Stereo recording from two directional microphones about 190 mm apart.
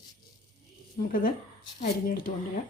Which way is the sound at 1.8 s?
50° left (ahead or behind).